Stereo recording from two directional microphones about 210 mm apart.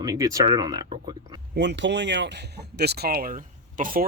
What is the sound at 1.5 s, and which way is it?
A man's voice, 55° right (ahead or behind).